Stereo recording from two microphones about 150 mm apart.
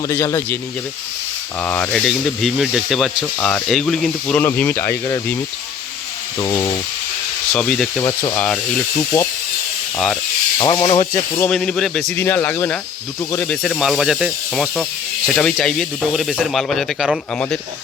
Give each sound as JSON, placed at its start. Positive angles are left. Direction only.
{"t": 0.1, "sound": "speech", "side_deg": 20}
{"t": 7.5, "sound": "speech", "side_deg": 5}
{"t": 8.0, "sound": "speech", "side_deg": 20}
{"t": 10.6, "sound": "speech", "side_deg": 30}
{"t": 11.1, "sound": "speech", "side_deg": 10}